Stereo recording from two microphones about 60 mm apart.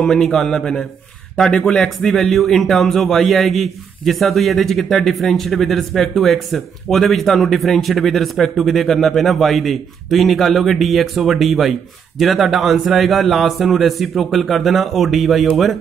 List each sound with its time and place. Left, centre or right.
0.0 s a man's voice: centre
1.3 s speech: centre
1.6 s a man's voice: centre